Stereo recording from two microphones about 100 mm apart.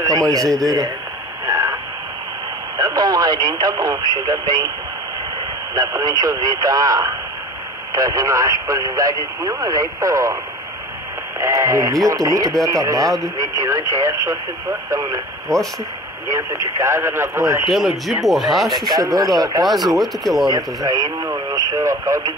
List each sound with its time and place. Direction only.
0.0 s speech: 35° right (ahead or behind)
1.4 s a sound: 30° right (ahead or behind)
2.8 s speech: 40° right (ahead or behind)
5.8 s speech: 40° right (ahead or behind)
11.3 s speech: 30° right (ahead or behind)
15.4 s speech: 5° left (ahead or behind)
16.3 s speech: 30° right (ahead or behind)
17.6 s speech: centre (ahead or behind)
18.7 s speech: 40° right (ahead or behind)
19.6 s speech: centre (ahead or behind)
20.4 s speech: 35° right (ahead or behind)